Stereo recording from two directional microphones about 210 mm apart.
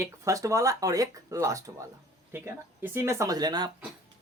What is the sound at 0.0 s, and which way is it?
Speech, 15° right (ahead or behind).